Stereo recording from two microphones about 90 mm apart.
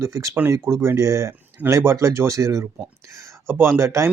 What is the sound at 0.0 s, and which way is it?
Speech, 35° right (ahead or behind).